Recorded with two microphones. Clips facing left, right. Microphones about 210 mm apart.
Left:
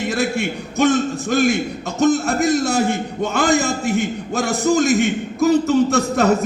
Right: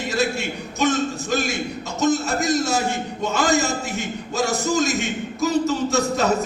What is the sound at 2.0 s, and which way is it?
A man's voice, 55° left (ahead or behind).